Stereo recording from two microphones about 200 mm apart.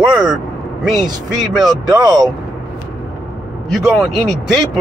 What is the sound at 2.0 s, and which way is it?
Speech, 20° right (ahead or behind).